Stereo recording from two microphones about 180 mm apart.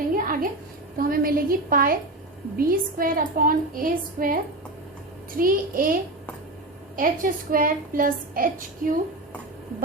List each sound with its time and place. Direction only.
0.2 s a sound: 50° right (ahead or behind)
0.9 s a woman's voice: 55° right (ahead or behind)
5.4 s a woman's voice: 50° right (ahead or behind)